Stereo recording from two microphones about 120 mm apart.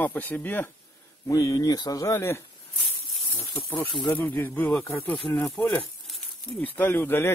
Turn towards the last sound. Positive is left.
turn(degrees=20)  # may be behind; listen again after turning